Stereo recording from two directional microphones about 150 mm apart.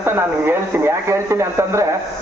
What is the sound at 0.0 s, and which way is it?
A man's voice, 15° right (ahead or behind).